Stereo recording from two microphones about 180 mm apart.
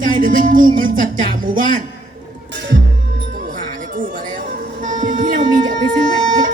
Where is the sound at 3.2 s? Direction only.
50° right (ahead or behind).